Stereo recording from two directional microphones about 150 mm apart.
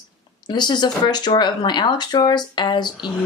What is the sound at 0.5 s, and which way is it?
A woman's voice, 30° left (ahead or behind).